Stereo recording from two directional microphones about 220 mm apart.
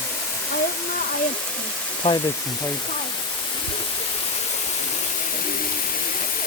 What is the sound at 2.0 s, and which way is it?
Speech, 20° left (ahead or behind).